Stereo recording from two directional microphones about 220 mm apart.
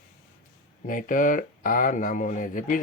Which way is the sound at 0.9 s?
35° left (ahead or behind).